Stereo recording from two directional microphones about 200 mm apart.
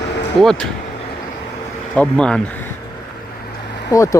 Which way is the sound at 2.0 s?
5° left (ahead or behind).